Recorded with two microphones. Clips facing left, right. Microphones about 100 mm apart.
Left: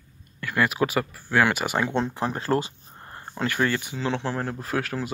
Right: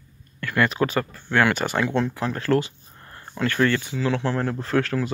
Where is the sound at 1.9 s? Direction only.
25° left (ahead or behind).